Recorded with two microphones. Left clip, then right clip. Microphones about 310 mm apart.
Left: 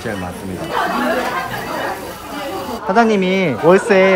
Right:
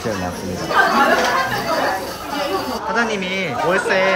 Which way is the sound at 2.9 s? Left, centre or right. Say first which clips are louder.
Left 8 dB; centre.